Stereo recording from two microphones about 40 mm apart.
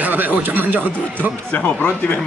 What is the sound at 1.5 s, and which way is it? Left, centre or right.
Speech, left.